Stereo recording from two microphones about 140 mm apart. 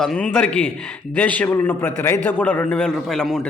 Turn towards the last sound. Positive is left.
turn(degrees=0)  # may be behind; listen again after turning